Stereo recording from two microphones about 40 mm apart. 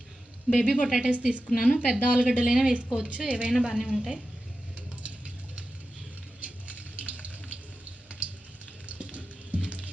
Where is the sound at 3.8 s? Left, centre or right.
Centre.